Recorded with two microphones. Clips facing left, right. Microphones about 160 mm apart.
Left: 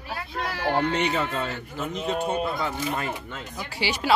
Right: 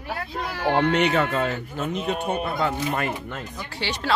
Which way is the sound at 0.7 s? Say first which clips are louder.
Right 5 dB; 65° right (ahead or behind).